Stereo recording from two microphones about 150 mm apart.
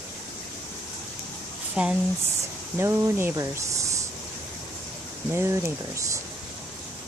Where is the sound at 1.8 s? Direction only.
10° right (ahead or behind).